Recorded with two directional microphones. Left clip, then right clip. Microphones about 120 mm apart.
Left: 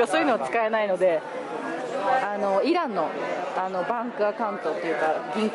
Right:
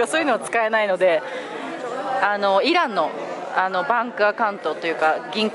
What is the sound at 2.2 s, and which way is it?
Speech, 20° left (ahead or behind).